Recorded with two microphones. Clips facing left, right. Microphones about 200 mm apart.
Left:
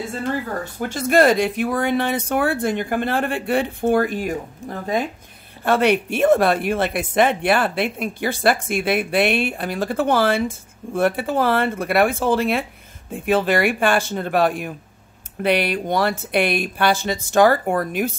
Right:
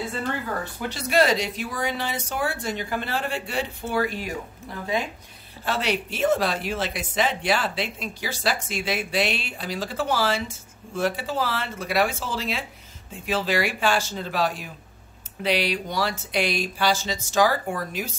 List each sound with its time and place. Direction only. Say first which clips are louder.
0.7 s speech: left 6 dB; 50° left (ahead or behind)